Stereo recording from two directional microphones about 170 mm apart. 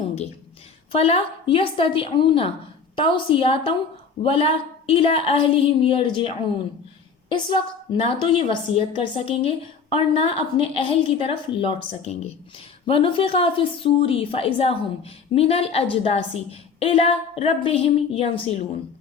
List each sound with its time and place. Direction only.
0.9 s a woman's voice: 35° left (ahead or behind)